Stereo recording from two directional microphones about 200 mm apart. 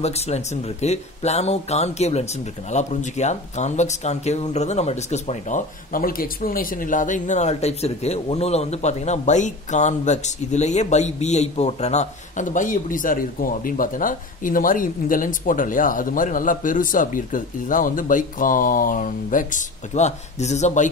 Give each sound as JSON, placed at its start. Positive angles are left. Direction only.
{"t": 0.0, "sound": "speech", "side_deg": 30}